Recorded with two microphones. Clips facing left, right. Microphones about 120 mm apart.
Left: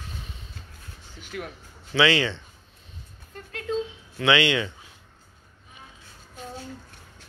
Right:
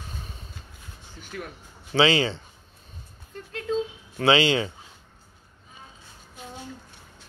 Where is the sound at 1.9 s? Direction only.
25° right (ahead or behind).